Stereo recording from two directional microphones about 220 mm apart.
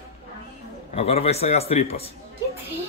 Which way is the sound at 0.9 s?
25° left (ahead or behind).